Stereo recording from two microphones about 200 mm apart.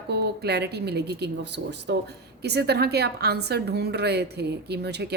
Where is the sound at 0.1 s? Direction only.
55° right (ahead or behind).